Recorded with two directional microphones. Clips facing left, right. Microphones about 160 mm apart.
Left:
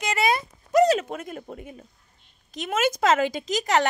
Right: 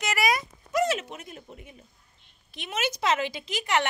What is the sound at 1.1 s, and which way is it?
A child's voice, 55° left (ahead or behind).